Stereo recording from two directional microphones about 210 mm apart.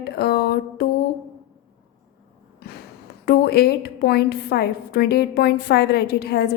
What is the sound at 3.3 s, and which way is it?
A woman's voice, 50° left (ahead or behind).